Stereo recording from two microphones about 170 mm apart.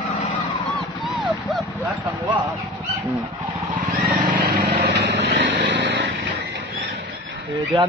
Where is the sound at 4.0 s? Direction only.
55° right (ahead or behind); by 6.1 s 75° right (ahead or behind).